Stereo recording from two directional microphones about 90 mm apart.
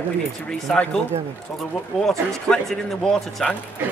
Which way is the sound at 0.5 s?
10° left (ahead or behind).